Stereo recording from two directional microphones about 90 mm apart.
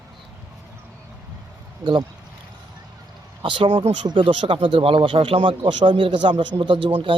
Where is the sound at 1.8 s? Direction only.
55° right (ahead or behind).